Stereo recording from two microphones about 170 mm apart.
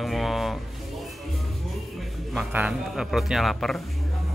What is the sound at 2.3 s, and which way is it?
A man's voice, 5° right (ahead or behind).